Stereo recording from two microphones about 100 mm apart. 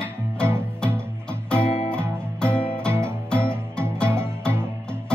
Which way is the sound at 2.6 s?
10° left (ahead or behind).